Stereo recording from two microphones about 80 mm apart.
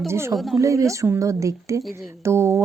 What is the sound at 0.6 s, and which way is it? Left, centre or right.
Speech, right.